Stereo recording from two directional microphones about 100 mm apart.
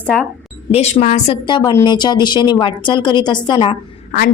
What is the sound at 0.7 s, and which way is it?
Speech, 90° left.